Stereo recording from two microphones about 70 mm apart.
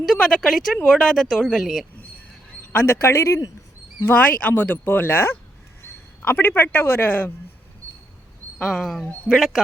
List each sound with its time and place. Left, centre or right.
0.0 s speech: centre
2.7 s a man's voice: left
4.0 s a man's voice: left
8.6 s speech: centre